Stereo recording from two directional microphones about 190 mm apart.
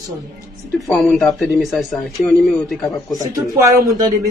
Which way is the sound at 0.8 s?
Centre (ahead or behind).